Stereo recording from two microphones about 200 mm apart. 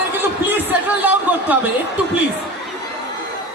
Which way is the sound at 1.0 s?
10° right (ahead or behind).